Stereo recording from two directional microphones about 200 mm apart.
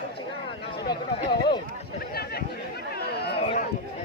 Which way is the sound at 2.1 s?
50° left (ahead or behind).